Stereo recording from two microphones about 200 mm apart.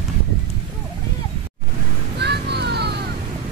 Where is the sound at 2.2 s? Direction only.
55° right (ahead or behind).